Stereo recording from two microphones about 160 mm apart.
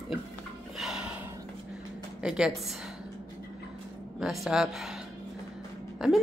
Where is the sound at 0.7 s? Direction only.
5° right (ahead or behind).